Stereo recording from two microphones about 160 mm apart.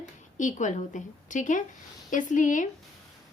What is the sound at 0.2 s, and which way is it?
A woman's voice, 50° left (ahead or behind).